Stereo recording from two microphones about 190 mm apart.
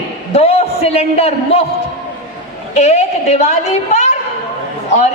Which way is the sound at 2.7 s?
35° left (ahead or behind).